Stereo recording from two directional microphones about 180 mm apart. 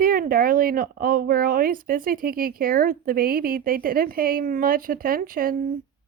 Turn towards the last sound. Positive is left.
turn(degrees=-50)  # may be behind; listen again after turning